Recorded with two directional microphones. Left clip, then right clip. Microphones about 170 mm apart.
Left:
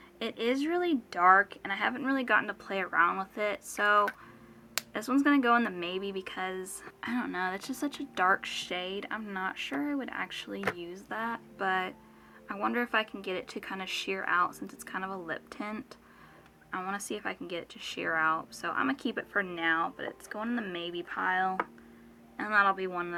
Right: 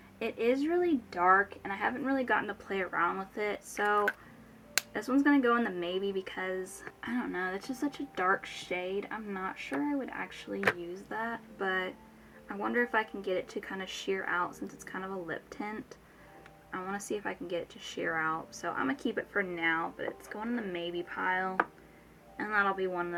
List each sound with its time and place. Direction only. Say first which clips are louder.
0.2 s speech: right 1 dB; 25° left (ahead or behind)